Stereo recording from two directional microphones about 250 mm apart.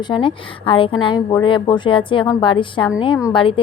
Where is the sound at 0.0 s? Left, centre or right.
Centre.